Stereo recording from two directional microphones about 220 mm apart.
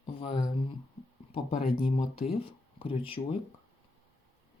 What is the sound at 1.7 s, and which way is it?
Speech, 25° left (ahead or behind).